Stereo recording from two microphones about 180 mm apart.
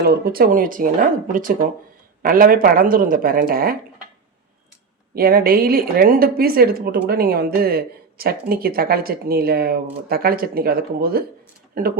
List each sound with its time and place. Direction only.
0.0 s speech: 60° right (ahead or behind)
5.1 s a woman's voice: 55° right (ahead or behind)